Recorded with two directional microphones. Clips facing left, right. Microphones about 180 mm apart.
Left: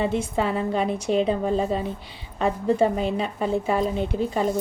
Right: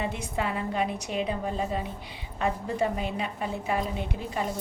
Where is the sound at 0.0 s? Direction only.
30° left (ahead or behind).